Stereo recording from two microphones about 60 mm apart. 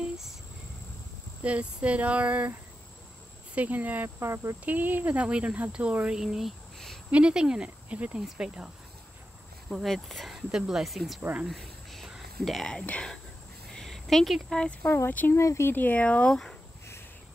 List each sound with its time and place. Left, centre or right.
1.4 s speech: right
3.5 s speech: right
4.2 s speech: right
4.6 s speech: right; by 6.5 s centre
7.1 s speech: centre
9.8 s speech: centre
11.4 s cricket: centre
12.4 s speech: centre
13.7 s a sound: centre
15.0 s speech: left
15.3 s speech: left
15.7 s speech: left
16.3 s speech: centre